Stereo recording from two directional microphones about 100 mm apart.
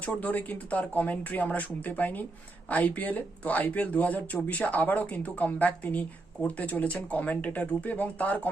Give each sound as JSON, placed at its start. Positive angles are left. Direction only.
{"t": 0.0, "sound": "speech", "side_deg": 15}